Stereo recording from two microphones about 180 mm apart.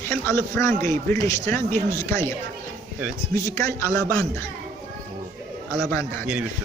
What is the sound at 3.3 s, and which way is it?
A man's voice, 15° left (ahead or behind).